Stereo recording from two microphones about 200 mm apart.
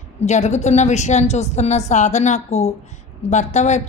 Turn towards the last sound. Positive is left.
turn(degrees=35)  # may be behind; listen again after turning